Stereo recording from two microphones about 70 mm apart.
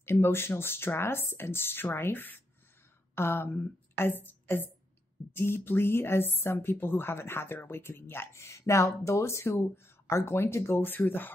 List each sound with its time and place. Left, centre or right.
0.0 s a woman's voice: left